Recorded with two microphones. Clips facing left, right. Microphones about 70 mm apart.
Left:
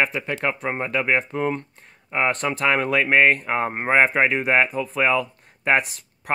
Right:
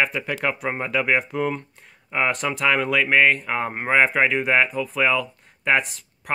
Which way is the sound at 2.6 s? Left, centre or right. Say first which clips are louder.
Even; centre.